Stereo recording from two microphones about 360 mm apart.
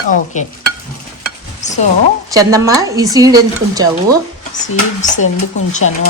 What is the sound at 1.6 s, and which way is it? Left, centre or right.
Speech, centre.